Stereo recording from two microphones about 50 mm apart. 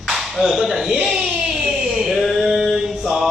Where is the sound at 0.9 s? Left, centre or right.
Right.